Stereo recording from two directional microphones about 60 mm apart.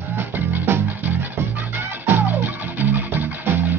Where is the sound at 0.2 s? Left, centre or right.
Right.